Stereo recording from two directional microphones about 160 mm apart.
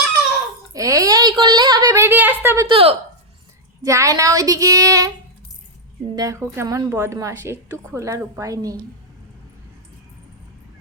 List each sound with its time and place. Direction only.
0.7 s a woman's voice: 20° right (ahead or behind)
2.6 s a woman's voice: 35° right (ahead or behind)
3.8 s a woman's voice: 20° right (ahead or behind)
6.1 s a woman's voice: 20° right (ahead or behind)